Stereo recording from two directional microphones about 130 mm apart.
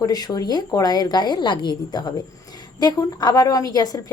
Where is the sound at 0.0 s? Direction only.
30° left (ahead or behind).